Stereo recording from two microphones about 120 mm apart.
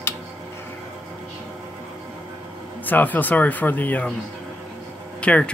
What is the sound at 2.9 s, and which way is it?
Speech, 15° left (ahead or behind).